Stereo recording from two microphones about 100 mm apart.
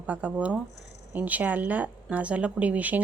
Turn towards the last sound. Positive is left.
turn(degrees=-15)  # may be behind; listen again after turning